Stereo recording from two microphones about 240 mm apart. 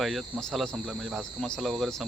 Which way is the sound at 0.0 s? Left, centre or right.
Centre.